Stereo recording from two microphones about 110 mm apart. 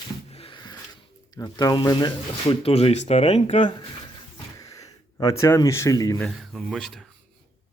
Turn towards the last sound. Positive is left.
turn(degrees=0)  # may be behind; listen again after turning